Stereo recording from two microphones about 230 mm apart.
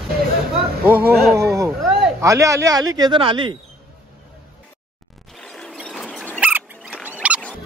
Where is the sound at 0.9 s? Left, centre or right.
Centre.